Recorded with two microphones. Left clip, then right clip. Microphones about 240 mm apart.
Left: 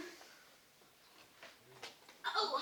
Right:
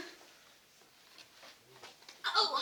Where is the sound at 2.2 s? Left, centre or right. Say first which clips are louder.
Right 5 dB; right.